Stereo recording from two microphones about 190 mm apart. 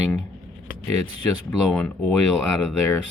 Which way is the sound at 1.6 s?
Centre (ahead or behind).